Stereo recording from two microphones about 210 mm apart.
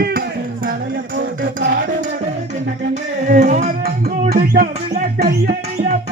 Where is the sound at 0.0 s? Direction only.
45° right (ahead or behind).